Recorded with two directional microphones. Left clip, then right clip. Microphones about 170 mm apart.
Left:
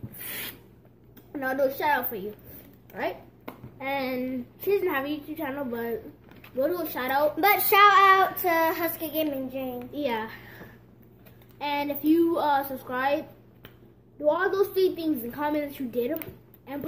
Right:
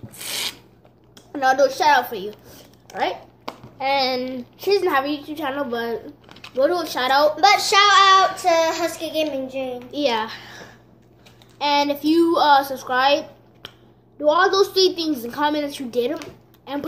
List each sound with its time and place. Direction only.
0.3 s filing: 5° right (ahead or behind)
1.1 s a woman's voice: 5° right (ahead or behind)
7.3 s child singing: 50° left (ahead or behind)
9.9 s a woman's voice: 10° right (ahead or behind)
11.5 s a child's voice: 10° right (ahead or behind)